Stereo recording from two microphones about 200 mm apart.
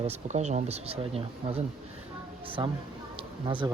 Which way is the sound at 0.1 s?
35° right (ahead or behind).